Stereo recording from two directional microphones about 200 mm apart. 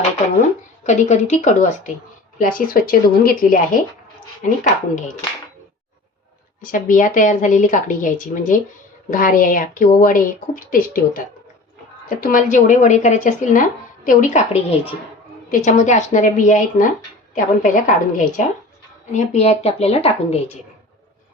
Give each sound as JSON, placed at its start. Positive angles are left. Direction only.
{"t": 0.9, "sound": "a woman's voice", "side_deg": 35}
{"t": 6.6, "sound": "a woman's voice", "side_deg": 45}